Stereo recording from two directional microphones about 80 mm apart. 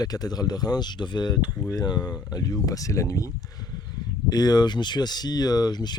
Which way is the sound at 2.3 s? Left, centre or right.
Left.